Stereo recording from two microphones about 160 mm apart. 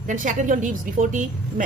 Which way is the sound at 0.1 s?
50° right (ahead or behind).